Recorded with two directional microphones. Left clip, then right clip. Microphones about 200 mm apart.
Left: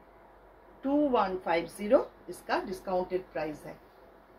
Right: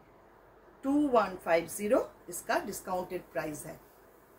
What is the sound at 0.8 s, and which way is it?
A woman's voice, 10° right (ahead or behind).